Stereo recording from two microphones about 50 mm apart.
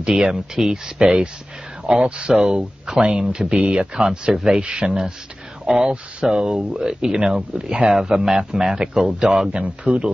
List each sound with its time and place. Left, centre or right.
0.0 s speech: centre
9.5 s speech: right